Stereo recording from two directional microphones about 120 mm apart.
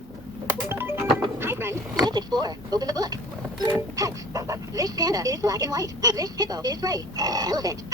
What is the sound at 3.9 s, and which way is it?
Speech, 30° right (ahead or behind).